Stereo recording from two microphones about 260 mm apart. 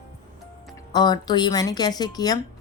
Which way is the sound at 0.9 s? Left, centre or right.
Centre.